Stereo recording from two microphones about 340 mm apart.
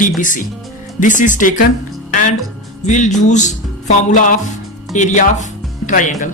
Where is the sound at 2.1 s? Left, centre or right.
Left.